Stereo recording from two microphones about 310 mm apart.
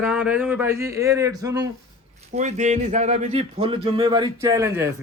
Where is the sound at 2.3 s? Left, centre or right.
Right.